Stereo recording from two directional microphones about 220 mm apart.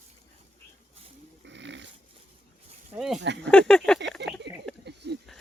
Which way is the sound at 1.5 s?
55° right (ahead or behind).